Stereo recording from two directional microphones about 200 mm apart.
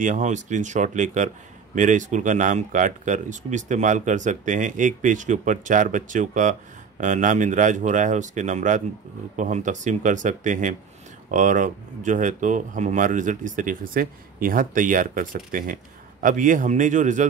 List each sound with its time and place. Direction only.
0.0 s speech: 40° right (ahead or behind)